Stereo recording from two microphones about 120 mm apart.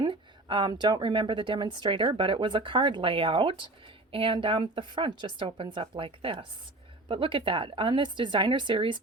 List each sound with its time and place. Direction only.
0.0 s a woman's voice: 40° right (ahead or behind)